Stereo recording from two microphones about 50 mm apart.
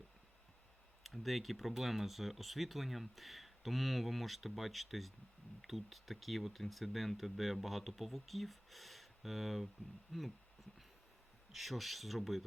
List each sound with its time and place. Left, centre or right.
1.0 s speech: centre
11.5 s speech: centre